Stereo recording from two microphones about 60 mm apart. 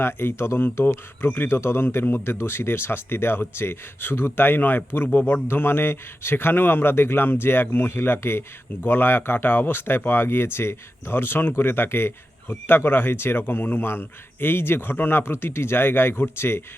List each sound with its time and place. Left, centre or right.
0.0 s speech: left